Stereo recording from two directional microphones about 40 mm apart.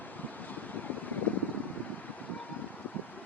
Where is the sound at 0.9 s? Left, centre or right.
Left.